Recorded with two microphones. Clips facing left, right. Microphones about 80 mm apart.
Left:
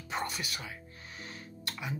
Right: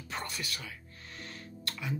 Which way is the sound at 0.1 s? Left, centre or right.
Left.